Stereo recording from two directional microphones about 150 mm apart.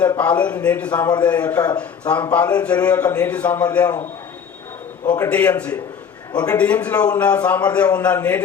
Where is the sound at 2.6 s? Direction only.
10° left (ahead or behind).